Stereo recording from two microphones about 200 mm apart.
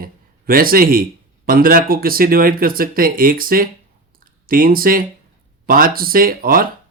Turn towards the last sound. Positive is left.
turn(degrees=-45)  # may be behind; listen again after turning